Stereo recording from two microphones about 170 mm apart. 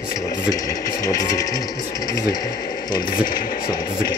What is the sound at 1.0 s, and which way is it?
Speech, 20° left (ahead or behind).